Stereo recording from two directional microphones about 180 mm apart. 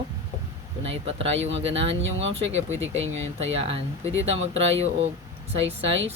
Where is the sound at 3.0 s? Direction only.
90° right.